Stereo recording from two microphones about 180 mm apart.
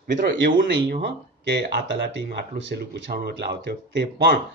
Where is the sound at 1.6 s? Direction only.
65° right (ahead or behind).